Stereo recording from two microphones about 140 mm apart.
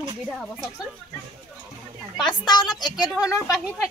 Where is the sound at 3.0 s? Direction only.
5° right (ahead or behind).